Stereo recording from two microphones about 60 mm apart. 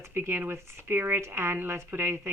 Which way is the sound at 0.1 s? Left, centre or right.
Right.